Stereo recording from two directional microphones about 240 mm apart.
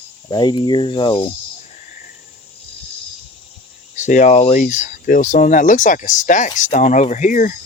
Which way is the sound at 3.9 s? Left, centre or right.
Left.